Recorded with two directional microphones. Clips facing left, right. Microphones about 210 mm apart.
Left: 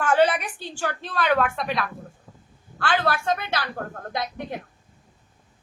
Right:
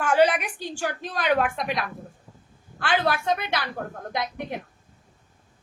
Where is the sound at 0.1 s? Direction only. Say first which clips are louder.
Even; 10° right (ahead or behind).